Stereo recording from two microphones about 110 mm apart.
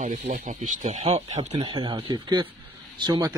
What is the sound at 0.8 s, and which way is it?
Speech, 90° right.